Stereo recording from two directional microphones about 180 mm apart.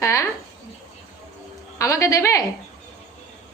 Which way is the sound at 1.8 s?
15° left (ahead or behind).